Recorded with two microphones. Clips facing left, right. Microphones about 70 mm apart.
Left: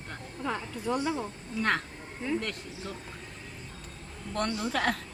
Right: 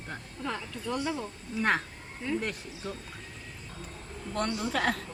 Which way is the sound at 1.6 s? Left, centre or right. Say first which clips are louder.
Right 1 dB; centre.